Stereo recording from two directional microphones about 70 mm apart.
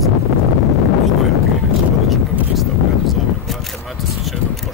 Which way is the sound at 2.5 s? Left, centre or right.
Centre.